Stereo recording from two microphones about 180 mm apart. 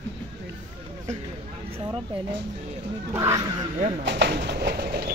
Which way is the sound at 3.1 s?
15° right (ahead or behind).